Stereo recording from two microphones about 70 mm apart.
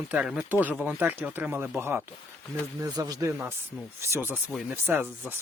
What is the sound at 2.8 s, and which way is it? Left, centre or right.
Speech, right.